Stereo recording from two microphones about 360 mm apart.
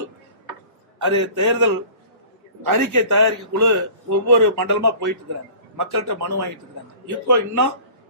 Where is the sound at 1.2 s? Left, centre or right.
Right.